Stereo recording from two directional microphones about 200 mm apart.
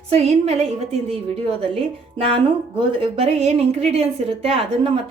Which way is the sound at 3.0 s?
30° right (ahead or behind).